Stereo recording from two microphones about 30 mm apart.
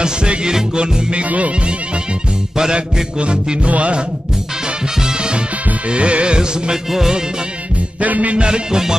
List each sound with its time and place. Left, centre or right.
0.0 s music: right
2.7 s music: right
5.0 s music: right
5.9 s music: right
8.0 s music: right
8.4 s music: right